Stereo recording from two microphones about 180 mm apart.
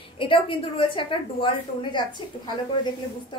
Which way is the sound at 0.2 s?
30° left (ahead or behind).